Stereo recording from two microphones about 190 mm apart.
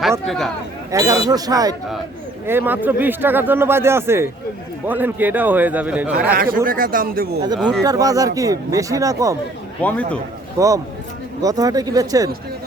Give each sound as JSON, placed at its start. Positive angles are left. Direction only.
{"t": 0.3, "sound": "speech", "side_deg": 0}
{"t": 0.9, "sound": "a man's voice", "side_deg": -15}
{"t": 6.3, "sound": "speech", "side_deg": -50}
{"t": 7.9, "sound": "a man's voice", "side_deg": -20}
{"t": 9.8, "sound": "a man's voice", "side_deg": 5}
{"t": 10.6, "sound": "a man's voice", "side_deg": -15}